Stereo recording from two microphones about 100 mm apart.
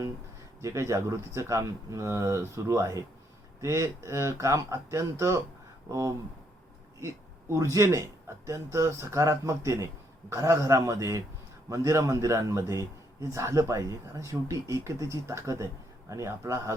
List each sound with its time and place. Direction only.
0.6 s a man's voice: 30° right (ahead or behind)